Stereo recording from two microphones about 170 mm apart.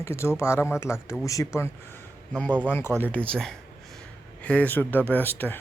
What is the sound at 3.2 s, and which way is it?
Speech, 10° left (ahead or behind).